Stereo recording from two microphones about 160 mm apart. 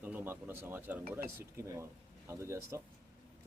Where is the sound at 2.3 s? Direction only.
15° right (ahead or behind).